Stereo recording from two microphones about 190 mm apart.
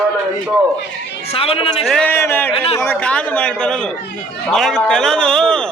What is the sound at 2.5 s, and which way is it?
Speech, 30° left (ahead or behind).